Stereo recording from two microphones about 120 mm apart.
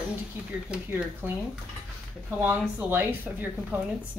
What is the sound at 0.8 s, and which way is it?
Speech, 15° right (ahead or behind).